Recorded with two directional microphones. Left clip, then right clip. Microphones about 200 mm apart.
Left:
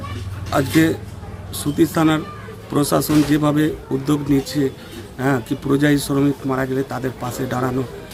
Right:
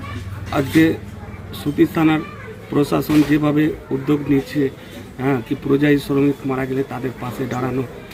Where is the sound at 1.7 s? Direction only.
15° left (ahead or behind).